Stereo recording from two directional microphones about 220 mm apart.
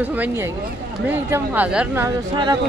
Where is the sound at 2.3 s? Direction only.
20° right (ahead or behind).